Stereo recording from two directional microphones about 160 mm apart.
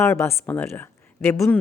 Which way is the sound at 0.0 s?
15° left (ahead or behind).